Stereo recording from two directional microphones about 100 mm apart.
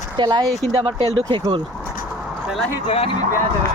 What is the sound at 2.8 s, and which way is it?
Speech, 80° left.